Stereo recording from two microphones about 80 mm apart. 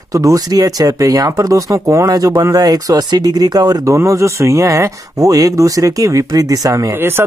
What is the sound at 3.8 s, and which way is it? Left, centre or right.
Speech, right.